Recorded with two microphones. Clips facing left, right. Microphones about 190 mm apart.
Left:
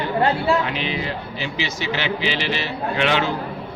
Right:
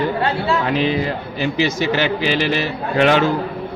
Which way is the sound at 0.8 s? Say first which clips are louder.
Right 7 dB; 45° right (ahead or behind).